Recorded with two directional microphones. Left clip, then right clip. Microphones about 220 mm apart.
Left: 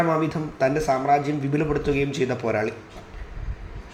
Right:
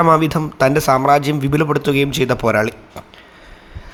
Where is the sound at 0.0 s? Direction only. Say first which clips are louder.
Right 9 dB; 40° right (ahead or behind).